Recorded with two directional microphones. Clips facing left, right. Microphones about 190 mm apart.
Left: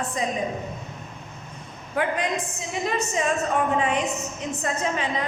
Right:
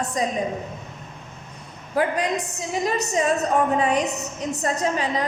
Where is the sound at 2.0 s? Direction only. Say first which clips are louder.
Right 3 dB; 35° right (ahead or behind).